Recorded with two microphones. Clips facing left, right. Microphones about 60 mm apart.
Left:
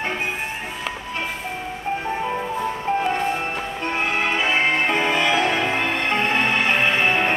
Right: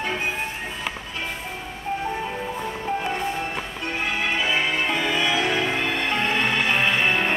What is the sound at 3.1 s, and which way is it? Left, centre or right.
Music, left.